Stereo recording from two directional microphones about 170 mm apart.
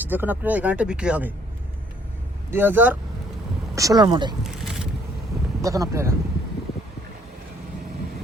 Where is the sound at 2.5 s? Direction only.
10° right (ahead or behind).